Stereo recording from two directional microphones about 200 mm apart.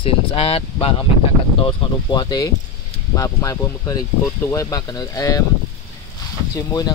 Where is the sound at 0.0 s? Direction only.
30° left (ahead or behind).